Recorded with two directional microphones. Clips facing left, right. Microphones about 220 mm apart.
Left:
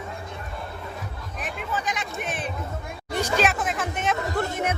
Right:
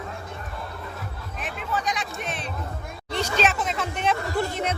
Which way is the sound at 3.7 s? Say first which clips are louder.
Right 1 dB; 45° left (ahead or behind).